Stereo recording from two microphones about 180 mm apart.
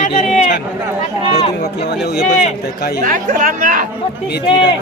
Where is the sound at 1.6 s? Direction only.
65° left (ahead or behind).